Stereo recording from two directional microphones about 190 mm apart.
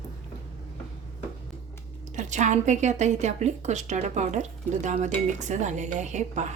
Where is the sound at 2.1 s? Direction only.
40° right (ahead or behind).